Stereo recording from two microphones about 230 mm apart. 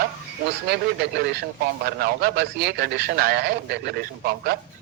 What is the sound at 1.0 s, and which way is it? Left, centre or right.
A man's voice, right.